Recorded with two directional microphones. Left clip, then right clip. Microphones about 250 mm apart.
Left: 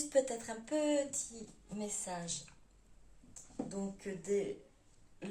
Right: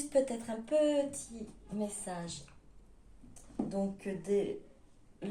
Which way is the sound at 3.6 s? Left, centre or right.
Centre.